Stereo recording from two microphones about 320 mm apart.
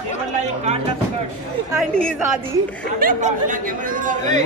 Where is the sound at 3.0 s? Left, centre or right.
Right.